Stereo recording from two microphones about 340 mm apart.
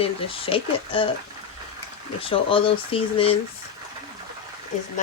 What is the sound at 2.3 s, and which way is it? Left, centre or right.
Speech, centre.